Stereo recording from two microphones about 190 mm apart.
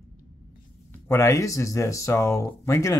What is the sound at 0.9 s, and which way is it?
Speech, 15° left (ahead or behind).